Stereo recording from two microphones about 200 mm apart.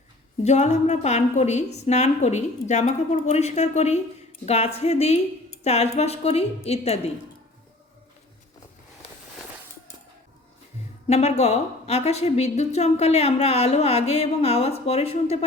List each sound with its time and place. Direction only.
0.4 s a woman's voice: 35° left (ahead or behind)
11.1 s a woman's voice: 35° left (ahead or behind)